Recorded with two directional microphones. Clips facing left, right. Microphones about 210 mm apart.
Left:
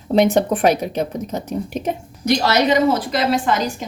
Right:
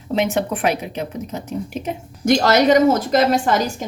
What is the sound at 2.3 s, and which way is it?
A woman's voice, 50° right (ahead or behind).